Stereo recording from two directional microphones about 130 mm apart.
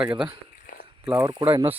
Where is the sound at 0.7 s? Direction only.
90° left.